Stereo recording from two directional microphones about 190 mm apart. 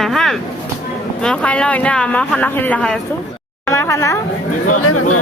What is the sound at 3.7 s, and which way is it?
Speech, 15° left (ahead or behind).